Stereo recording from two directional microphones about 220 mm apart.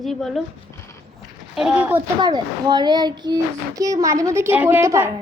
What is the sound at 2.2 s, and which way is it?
A child's voice, 20° right (ahead or behind).